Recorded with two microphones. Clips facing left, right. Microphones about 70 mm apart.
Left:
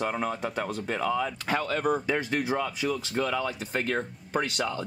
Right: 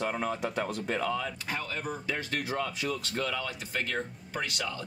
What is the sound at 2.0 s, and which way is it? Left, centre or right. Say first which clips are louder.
Speech: left 6 dB; left.